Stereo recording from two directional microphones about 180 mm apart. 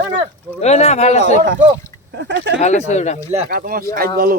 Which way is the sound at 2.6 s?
40° left (ahead or behind).